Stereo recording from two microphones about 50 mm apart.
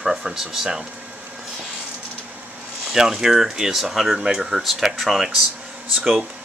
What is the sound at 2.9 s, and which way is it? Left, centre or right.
Speech, centre.